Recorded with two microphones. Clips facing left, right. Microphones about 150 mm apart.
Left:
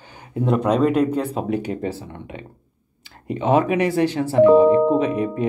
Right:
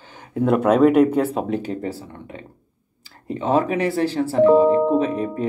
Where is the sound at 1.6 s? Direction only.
20° left (ahead or behind).